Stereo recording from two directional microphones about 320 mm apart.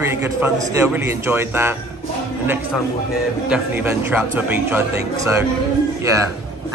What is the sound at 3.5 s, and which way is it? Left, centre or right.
A man's voice, centre.